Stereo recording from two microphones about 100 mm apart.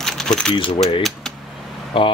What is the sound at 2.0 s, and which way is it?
Speech, 60° left (ahead or behind).